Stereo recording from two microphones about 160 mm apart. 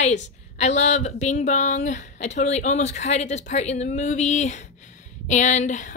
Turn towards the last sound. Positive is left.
turn(degrees=50)  # may be behind; listen again after turning